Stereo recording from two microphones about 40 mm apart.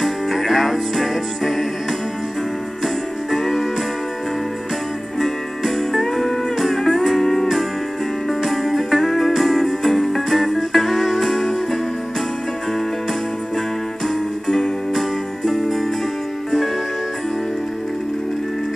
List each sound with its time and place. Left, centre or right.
0.0 s music: centre
2.8 s music: centre
5.2 s music: centre
14.0 s music: centre